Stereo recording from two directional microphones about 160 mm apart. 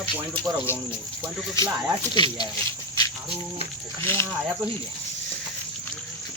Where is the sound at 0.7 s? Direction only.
15° left (ahead or behind).